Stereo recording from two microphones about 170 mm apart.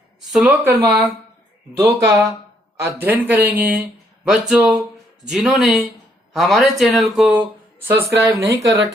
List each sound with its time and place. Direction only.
0.3 s speech: 10° right (ahead or behind)
7.9 s speech: 15° right (ahead or behind)